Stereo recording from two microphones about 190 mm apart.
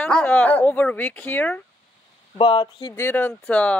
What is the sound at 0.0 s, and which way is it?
Speech, 10° left (ahead or behind).